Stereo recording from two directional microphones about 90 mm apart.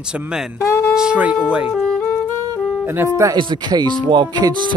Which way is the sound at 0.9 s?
10° right (ahead or behind).